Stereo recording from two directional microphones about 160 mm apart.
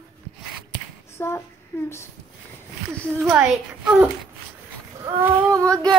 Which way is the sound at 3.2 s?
5° right (ahead or behind).